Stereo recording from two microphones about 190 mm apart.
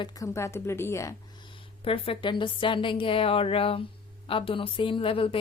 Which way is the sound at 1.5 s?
30° left (ahead or behind).